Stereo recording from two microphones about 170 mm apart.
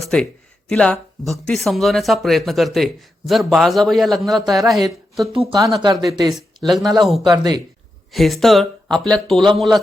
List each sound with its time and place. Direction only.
0.0 s a sound: 5° left (ahead or behind)
0.7 s speech: 5° left (ahead or behind)
5.3 s speech: 30° right (ahead or behind)
6.3 s speech: centre (ahead or behind)